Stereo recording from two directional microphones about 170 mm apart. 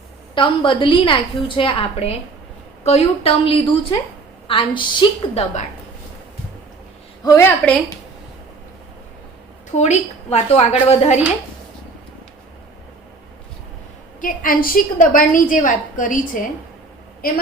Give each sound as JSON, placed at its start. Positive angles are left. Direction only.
{"t": 0.3, "sound": "a woman's voice", "side_deg": 30}
{"t": 7.3, "sound": "a woman's voice", "side_deg": 15}
{"t": 9.7, "sound": "a woman's voice", "side_deg": 40}
{"t": 14.2, "sound": "a woman's voice", "side_deg": 55}